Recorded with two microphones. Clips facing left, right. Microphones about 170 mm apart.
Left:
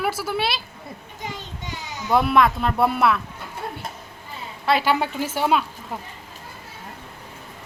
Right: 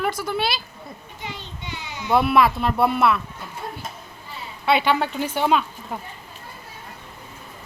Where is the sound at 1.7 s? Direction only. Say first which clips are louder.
Even; 40° left (ahead or behind).